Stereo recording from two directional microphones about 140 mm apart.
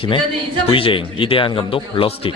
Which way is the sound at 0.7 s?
40° left (ahead or behind).